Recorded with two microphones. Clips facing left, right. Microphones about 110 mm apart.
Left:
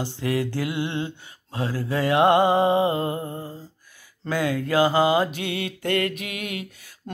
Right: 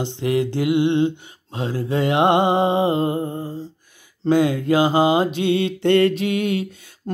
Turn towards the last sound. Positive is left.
turn(degrees=-25)  # may be behind; listen again after turning